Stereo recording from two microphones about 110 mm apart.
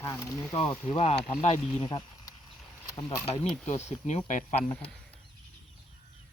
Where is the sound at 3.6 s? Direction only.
90° left.